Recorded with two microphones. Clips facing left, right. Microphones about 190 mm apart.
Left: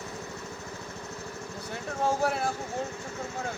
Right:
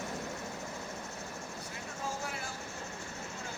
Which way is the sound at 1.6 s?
70° left (ahead or behind).